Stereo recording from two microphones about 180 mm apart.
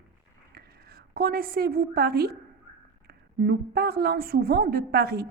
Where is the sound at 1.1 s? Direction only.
55° right (ahead or behind).